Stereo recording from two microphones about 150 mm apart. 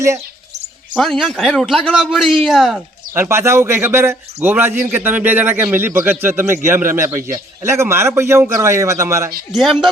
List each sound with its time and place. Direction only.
0.9 s a man's voice: centre (ahead or behind)
3.2 s a man's voice: 15° right (ahead or behind)
9.5 s a man's voice: centre (ahead or behind)